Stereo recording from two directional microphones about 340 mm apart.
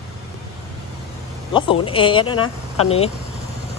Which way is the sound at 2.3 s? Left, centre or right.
Left.